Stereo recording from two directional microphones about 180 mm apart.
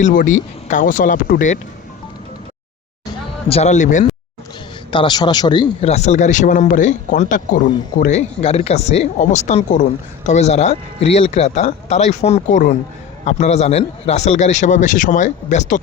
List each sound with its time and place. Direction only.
0.0 s speech: 45° left (ahead or behind)
3.5 s speech: 40° left (ahead or behind)
4.9 s speech: 25° left (ahead or behind); by 15.8 s 45° left (ahead or behind)